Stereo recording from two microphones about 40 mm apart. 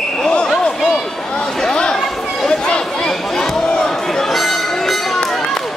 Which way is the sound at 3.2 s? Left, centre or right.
Centre.